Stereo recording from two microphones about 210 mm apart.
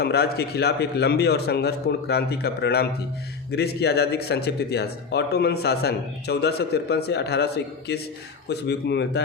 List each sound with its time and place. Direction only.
0.0 s speech: 50° left (ahead or behind)